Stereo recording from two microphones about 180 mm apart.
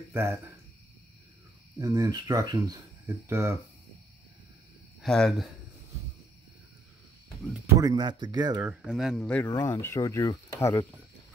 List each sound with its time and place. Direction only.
0.1 s speech: 15° right (ahead or behind)
1.8 s speech: 20° right (ahead or behind)
5.0 s speech: centre (ahead or behind)
7.8 s speech: 20° right (ahead or behind)
8.6 s speech: centre (ahead or behind)
9.5 s speech: 15° left (ahead or behind)